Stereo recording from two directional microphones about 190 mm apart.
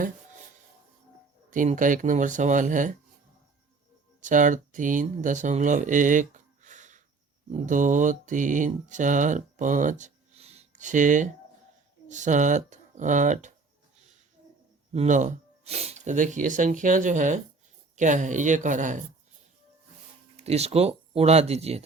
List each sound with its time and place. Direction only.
1.5 s speech: 40° right (ahead or behind)
4.2 s speech: 40° right (ahead or behind)
7.5 s mantra: 40° right (ahead or behind)
12.0 s speech: 40° right (ahead or behind)
14.9 s speech: 40° right (ahead or behind)
20.3 s speech: 35° right (ahead or behind)